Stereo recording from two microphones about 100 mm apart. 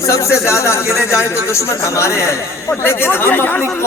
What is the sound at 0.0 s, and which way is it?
Speech, 30° left (ahead or behind).